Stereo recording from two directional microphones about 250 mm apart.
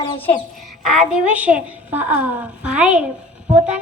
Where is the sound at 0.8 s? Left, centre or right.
Centre.